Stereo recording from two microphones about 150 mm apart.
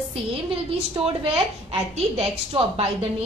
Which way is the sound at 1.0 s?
40° right (ahead or behind).